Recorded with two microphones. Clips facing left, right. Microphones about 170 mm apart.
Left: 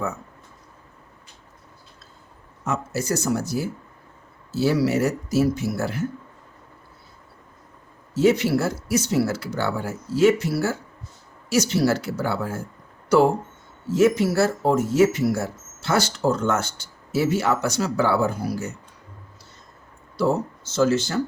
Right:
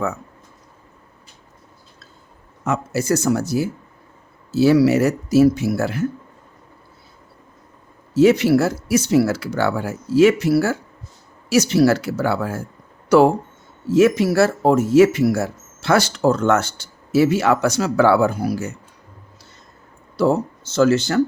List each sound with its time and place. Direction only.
2.6 s speech: 85° right
8.1 s speech: 75° right (ahead or behind)
13.9 s speech: 80° right
20.1 s speech: 70° right (ahead or behind)